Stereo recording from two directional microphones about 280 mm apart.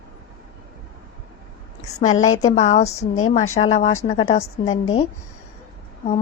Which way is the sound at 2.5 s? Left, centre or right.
Left.